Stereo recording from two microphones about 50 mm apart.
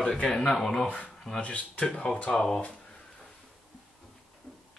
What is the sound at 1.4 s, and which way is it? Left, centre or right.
Speech, left.